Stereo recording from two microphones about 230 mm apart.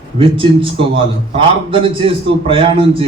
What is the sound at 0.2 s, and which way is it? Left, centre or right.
Speech, right.